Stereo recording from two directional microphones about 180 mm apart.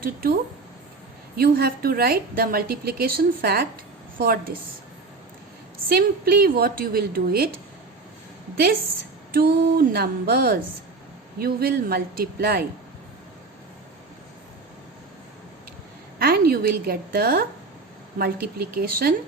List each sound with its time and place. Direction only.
0.0 s speech: 55° right (ahead or behind)
1.4 s a woman's voice: 60° right (ahead or behind)
5.9 s a woman's voice: 60° right (ahead or behind)
9.3 s a woman's voice: 55° right (ahead or behind)
16.1 s a woman's voice: 55° right (ahead or behind)